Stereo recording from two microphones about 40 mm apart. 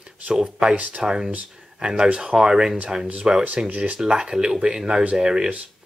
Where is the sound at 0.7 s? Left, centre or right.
Right.